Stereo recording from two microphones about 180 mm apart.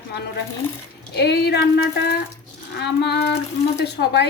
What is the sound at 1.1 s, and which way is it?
A woman's voice, 70° left (ahead or behind).